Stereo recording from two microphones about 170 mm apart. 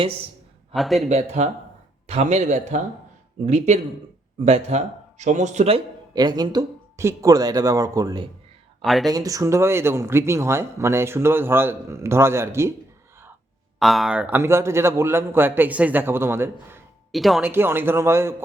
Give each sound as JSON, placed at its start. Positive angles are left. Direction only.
{"t": 0.7, "sound": "a man's voice", "side_deg": 0}
{"t": 1.0, "sound": "speech", "side_deg": -40}
{"t": 8.8, "sound": "speech", "side_deg": 0}
{"t": 9.0, "sound": "speech", "side_deg": -20}
{"t": 13.7, "sound": "speech", "side_deg": 0}
{"t": 17.1, "sound": "a man's voice", "side_deg": 0}
{"t": 17.4, "sound": "speech", "side_deg": -15}